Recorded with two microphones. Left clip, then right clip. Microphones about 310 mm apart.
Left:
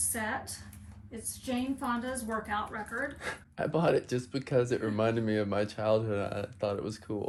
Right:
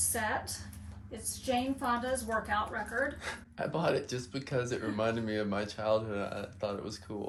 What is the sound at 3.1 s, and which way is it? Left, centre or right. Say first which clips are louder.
Speech: left 2 dB; left.